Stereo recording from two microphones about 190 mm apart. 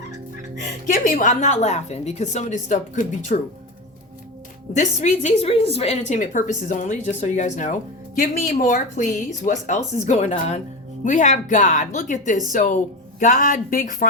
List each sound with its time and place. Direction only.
0.9 s a woman's voice: 45° left (ahead or behind)
4.7 s a woman's voice: 40° left (ahead or behind)